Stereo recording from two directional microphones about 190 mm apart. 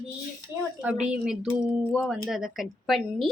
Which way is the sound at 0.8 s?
5° right (ahead or behind).